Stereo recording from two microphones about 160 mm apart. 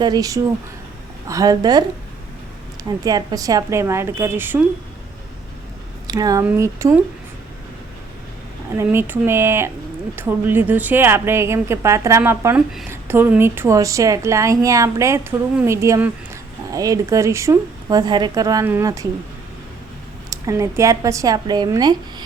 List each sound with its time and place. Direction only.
0.0 s a woman's voice: 25° right (ahead or behind)
3.0 s a woman's voice: 25° right (ahead or behind)
6.1 s a woman's voice: 25° right (ahead or behind)
8.7 s a woman's voice: 15° right (ahead or behind)
20.3 s a woman's voice: 20° right (ahead or behind)